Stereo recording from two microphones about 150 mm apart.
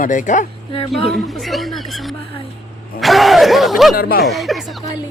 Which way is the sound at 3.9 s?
80° left.